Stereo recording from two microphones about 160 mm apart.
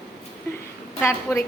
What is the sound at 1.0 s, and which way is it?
Speech, 15° left (ahead or behind).